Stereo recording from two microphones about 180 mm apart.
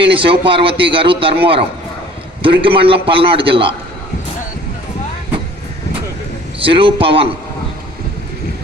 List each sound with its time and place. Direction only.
0.0 s a man's voice: 30° right (ahead or behind)
6.6 s a man's voice: 30° right (ahead or behind)